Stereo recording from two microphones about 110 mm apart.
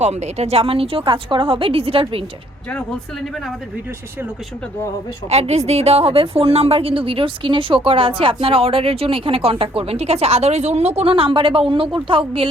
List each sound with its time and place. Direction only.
0.0 s a woman's voice: 85° right; by 2.2 s 60° right (ahead or behind)
5.3 s a woman's voice: 75° right (ahead or behind); by 12.5 s 55° right (ahead or behind)